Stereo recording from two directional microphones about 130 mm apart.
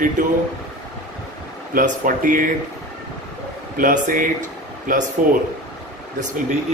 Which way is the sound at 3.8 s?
90° right.